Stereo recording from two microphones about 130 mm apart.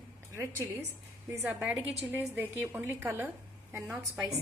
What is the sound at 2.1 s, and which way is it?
A woman's voice, 15° right (ahead or behind).